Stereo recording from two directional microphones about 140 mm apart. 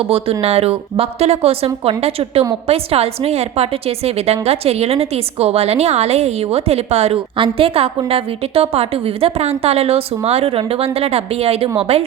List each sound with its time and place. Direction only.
0.0 s a woman's voice: 45° right (ahead or behind)